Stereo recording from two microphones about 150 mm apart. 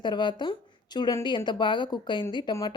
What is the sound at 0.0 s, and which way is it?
Speech, 30° left (ahead or behind).